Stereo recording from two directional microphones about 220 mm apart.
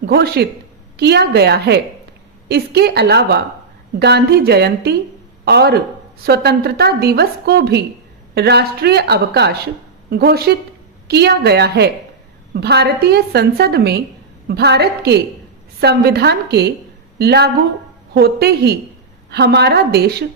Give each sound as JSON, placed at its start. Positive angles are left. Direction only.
{"t": 0.0, "sound": "a woman's voice", "side_deg": -45}